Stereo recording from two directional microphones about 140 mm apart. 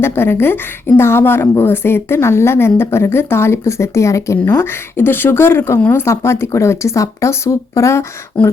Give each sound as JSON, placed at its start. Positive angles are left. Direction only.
{"t": 0.0, "sound": "speech", "side_deg": 15}